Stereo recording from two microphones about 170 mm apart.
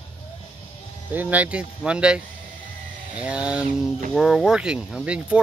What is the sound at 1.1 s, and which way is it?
Speech, 10° right (ahead or behind).